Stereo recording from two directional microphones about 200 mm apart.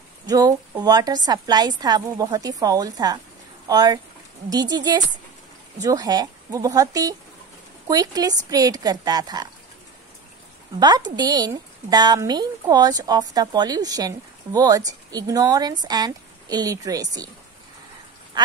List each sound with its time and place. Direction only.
0.3 s a woman's voice: 20° right (ahead or behind)
10.8 s a woman's voice: 20° right (ahead or behind)
18.3 s frog: 20° right (ahead or behind)